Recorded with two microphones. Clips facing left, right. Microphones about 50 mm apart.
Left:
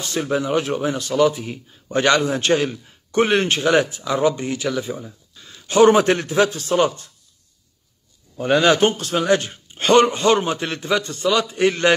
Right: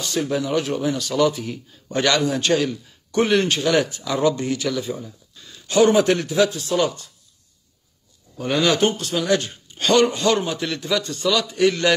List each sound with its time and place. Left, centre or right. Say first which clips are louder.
0.0 s a man's voice: left 1 dB; left
1.2 s speech: left 3 dB; centre
2.0 s a man's voice: left 2 dB; left
5.4 s a man's voice: left 3 dB; left
8.4 s a man's voice: left 3 dB; left